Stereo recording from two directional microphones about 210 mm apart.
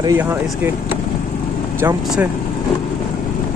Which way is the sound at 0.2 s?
10° right (ahead or behind).